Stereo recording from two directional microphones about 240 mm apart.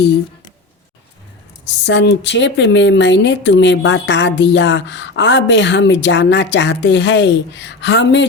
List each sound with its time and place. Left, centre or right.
1.6 s speech: left